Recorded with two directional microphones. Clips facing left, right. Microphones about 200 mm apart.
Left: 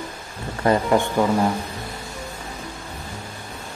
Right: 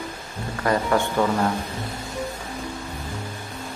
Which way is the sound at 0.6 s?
20° left (ahead or behind).